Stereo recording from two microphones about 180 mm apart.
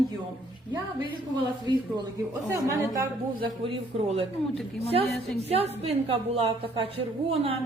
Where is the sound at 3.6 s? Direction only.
30° right (ahead or behind).